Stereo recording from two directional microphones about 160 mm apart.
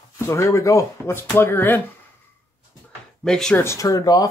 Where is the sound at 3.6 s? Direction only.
20° left (ahead or behind).